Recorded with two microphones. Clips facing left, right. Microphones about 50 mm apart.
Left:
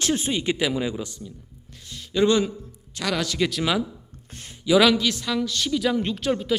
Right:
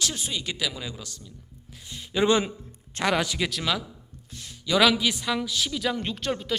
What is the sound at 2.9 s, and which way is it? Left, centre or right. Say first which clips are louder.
Speech: right 2 dB; right.